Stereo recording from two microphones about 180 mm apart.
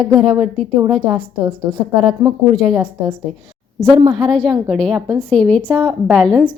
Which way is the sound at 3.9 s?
30° right (ahead or behind).